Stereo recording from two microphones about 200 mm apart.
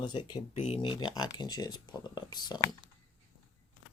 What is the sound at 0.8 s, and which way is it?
Speech, 25° left (ahead or behind).